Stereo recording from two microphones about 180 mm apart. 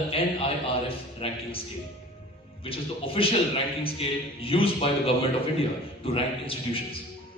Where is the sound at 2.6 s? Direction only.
30° left (ahead or behind).